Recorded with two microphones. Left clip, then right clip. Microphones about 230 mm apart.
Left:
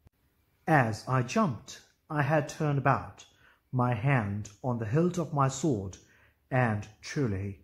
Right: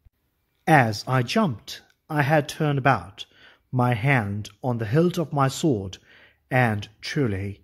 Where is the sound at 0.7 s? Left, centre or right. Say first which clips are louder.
Right 7 dB; right.